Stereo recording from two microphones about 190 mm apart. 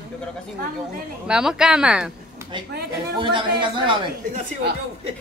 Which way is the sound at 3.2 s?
25° right (ahead or behind).